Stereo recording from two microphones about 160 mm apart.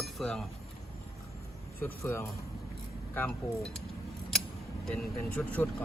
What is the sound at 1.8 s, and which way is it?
Speech, 15° left (ahead or behind).